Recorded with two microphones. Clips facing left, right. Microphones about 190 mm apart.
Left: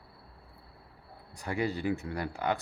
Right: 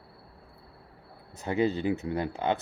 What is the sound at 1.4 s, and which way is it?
Speech, 20° right (ahead or behind).